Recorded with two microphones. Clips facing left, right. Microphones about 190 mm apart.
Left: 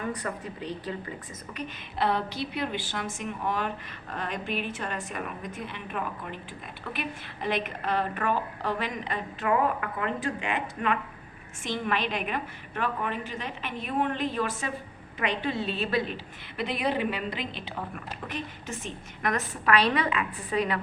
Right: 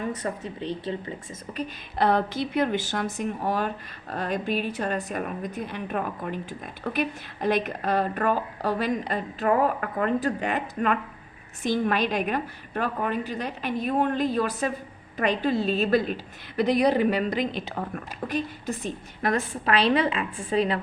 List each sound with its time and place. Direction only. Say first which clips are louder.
0.0 s speech: right 3 dB; 25° right (ahead or behind)
1.5 s a woman's voice: right 4 dB; 40° right (ahead or behind)